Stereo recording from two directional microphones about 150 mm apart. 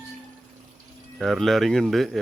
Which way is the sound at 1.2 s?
Centre (ahead or behind).